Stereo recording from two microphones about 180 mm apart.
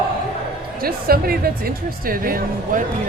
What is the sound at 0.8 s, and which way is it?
Speech, 55° right (ahead or behind).